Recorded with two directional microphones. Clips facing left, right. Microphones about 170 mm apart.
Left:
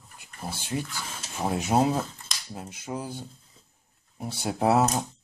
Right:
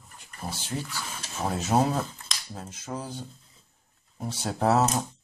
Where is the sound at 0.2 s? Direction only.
10° left (ahead or behind).